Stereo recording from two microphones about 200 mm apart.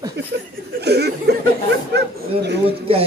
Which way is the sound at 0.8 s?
55° right (ahead or behind).